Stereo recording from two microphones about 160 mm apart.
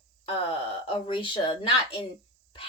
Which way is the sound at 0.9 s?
30° left (ahead or behind).